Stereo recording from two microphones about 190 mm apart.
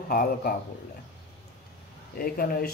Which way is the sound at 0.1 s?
50° left (ahead or behind).